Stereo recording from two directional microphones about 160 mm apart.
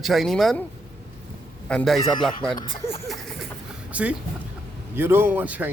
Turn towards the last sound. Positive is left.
turn(degrees=-10)  # may be behind; listen again after turning